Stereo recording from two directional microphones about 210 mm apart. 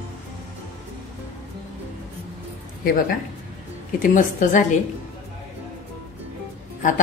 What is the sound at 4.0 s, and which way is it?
Speech, 35° left (ahead or behind).